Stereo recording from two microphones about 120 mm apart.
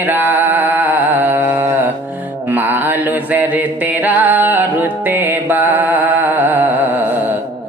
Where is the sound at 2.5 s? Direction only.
15° right (ahead or behind).